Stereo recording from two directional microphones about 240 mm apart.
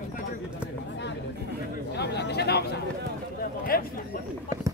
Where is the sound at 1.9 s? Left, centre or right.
Left.